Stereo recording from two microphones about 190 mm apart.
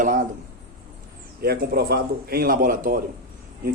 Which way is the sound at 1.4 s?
55° right (ahead or behind).